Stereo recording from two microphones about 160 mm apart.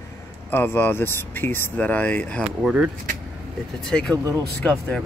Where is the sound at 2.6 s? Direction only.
5° right (ahead or behind).